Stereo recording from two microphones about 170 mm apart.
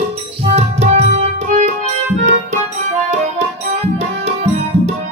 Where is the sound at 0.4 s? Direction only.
35° right (ahead or behind).